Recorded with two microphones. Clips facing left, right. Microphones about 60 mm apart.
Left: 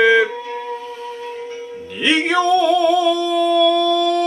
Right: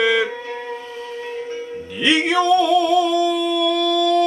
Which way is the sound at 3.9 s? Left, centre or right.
Left.